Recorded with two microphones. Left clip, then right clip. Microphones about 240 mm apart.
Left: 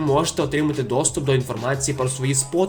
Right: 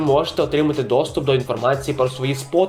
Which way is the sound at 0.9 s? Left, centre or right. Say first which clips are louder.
Right 4 dB; left.